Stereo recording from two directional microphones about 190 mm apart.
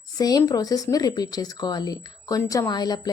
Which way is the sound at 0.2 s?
20° left (ahead or behind).